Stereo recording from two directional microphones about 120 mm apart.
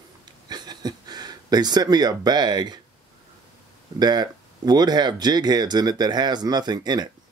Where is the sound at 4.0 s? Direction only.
35° right (ahead or behind).